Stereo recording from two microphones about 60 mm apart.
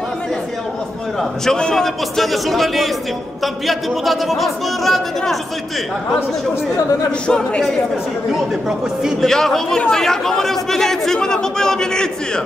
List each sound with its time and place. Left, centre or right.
1.4 s speech: centre
7.1 s speech: centre
9.2 s speech: centre